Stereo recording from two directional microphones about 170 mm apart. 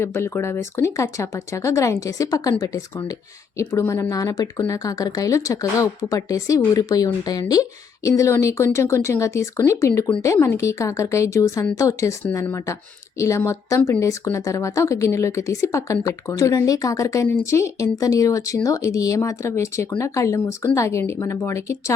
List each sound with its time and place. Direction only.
0.0 s speech: 15° left (ahead or behind)